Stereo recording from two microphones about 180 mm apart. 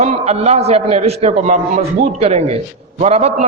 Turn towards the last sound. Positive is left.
turn(degrees=-35)  # may be behind; listen again after turning